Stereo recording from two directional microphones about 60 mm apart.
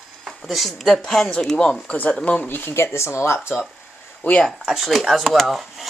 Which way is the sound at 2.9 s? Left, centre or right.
Left.